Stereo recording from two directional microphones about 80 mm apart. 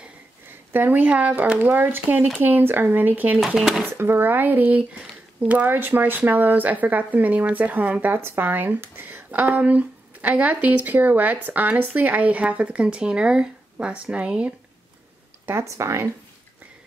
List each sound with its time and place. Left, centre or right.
0.5 s speech: right
3.3 s speech: centre
3.8 s speech: right
15.4 s speech: right